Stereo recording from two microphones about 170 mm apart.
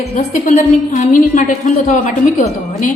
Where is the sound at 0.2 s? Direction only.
45° left (ahead or behind).